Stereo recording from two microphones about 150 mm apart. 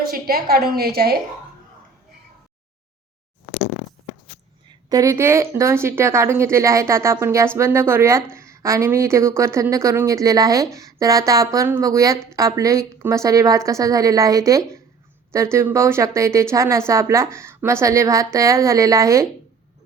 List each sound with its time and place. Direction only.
0.1 s a woman's voice: 85° right
4.9 s speech: 20° right (ahead or behind)